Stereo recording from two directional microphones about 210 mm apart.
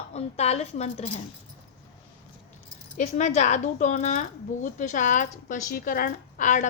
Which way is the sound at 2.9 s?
35° left (ahead or behind).